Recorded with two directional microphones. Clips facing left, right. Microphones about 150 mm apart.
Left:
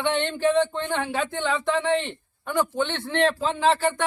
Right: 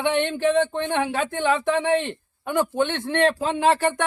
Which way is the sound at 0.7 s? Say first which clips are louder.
Right 3 dB; 50° right (ahead or behind).